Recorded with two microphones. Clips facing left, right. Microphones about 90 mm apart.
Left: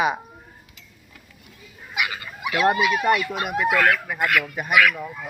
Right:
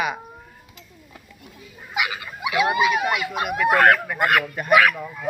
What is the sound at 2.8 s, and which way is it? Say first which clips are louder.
Speech: right 2 dB; 20° right (ahead or behind).